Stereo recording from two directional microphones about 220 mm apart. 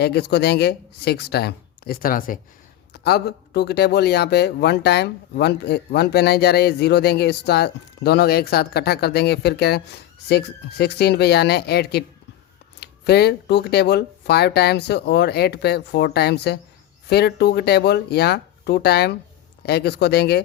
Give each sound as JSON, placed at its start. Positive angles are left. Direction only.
{"t": 0.0, "sound": "a man's voice", "side_deg": 50}